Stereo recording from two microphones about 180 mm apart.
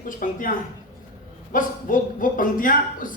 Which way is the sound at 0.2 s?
50° left (ahead or behind).